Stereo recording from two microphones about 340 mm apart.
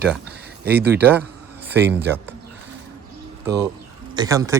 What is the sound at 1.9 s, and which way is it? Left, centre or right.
Speech, centre.